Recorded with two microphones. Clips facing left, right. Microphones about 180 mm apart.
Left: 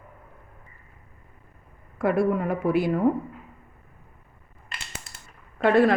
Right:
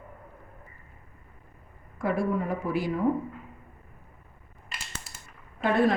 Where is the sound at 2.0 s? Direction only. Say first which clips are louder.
Left 5 dB; 65° left (ahead or behind).